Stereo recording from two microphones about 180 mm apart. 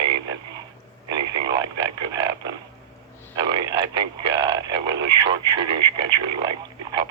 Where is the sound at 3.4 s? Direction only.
25° right (ahead or behind).